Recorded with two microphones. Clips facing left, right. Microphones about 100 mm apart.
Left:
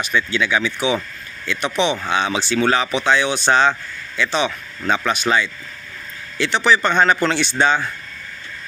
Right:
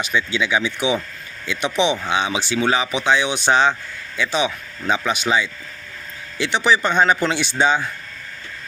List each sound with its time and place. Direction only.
0.0 s speech: 15° right (ahead or behind)